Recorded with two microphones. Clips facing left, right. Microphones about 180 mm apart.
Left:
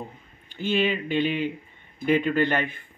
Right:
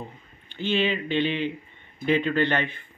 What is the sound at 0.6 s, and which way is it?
Speech, 10° left (ahead or behind).